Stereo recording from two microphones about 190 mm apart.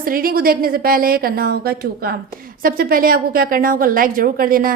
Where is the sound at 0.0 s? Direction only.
50° right (ahead or behind).